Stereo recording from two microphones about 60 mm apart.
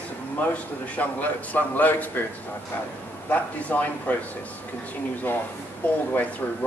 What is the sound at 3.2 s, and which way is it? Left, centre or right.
Speech, left.